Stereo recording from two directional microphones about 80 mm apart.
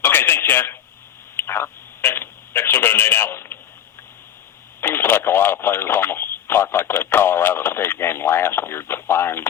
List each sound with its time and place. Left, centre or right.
0.0 s a sound: left
1.4 s telephone: left
4.8 s speech: left